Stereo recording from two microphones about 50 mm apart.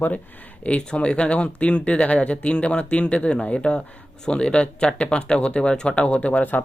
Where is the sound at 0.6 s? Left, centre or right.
Left.